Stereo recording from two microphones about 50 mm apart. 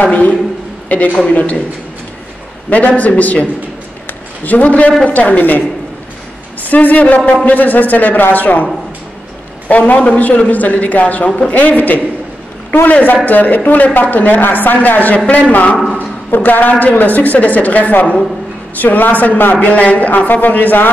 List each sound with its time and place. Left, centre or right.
0.0 s a man's voice: left
2.7 s speech: left
4.5 s a man's voice: left
6.7 s speech: left
9.7 s speech: left
13.0 s a man's voice: left